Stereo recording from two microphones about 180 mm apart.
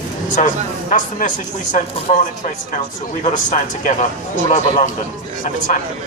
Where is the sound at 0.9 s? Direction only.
45° left (ahead or behind).